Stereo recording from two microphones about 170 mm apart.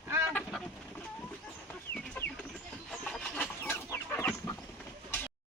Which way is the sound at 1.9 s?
10° left (ahead or behind).